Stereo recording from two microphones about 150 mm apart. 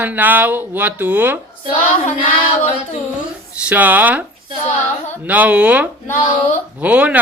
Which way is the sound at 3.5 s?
10° right (ahead or behind).